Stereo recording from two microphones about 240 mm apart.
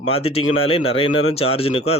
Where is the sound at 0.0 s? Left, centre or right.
Left.